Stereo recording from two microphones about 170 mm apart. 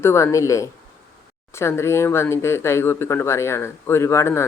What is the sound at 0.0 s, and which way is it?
Speech, 15° left (ahead or behind).